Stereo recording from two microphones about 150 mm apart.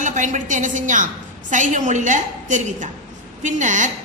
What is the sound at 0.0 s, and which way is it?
A woman's voice, 55° right (ahead or behind).